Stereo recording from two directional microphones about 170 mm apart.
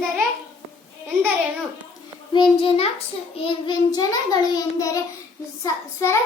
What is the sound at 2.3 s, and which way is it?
A child's voice, 30° left (ahead or behind).